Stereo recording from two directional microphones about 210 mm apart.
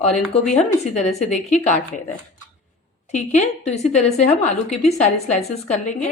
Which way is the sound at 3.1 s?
30° left (ahead or behind).